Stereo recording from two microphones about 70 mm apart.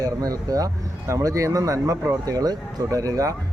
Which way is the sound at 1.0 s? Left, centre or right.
Right.